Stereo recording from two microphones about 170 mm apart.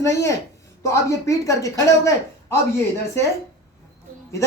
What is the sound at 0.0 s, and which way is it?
Speech, 15° left (ahead or behind).